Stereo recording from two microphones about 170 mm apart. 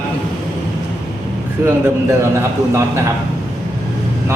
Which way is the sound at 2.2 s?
15° right (ahead or behind).